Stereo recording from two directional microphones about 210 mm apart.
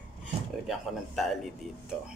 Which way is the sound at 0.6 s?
Centre (ahead or behind).